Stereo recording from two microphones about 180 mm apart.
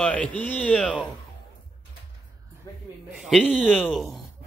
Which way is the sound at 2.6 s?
20° left (ahead or behind).